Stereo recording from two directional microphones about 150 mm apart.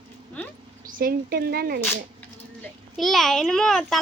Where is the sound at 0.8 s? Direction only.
75° right (ahead or behind).